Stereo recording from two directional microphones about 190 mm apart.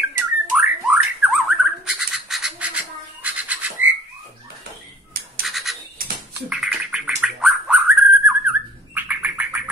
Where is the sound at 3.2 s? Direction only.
10° right (ahead or behind).